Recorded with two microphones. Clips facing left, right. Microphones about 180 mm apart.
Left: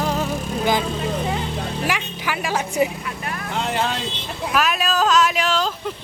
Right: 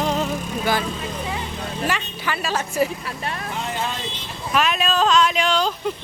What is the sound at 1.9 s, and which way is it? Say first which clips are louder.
A woman's voice: left 1 dB; 10° left (ahead or behind).